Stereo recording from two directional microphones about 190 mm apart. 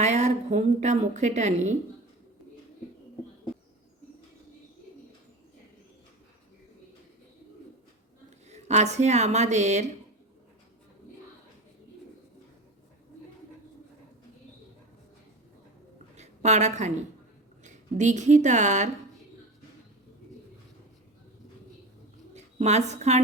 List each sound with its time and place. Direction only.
0.0 s a woman's voice: 35° right (ahead or behind)
8.4 s speech: 35° right (ahead or behind)
16.1 s a sound: 35° right (ahead or behind)
17.6 s speech: 40° right (ahead or behind)
22.5 s speech: 35° right (ahead or behind)